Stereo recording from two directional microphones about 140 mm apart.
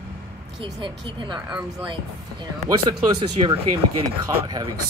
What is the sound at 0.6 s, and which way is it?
Speech, 40° right (ahead or behind).